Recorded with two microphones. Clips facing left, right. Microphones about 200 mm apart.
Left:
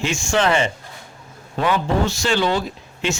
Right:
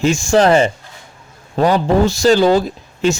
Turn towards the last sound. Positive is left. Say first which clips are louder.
# right 8 dB
turn(degrees=-40)  # may be behind; listen again after turning